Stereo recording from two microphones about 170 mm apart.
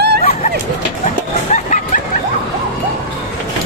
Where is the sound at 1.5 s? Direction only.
45° left (ahead or behind).